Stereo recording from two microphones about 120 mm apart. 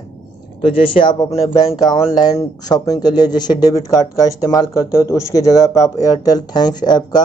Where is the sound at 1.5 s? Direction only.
35° left (ahead or behind).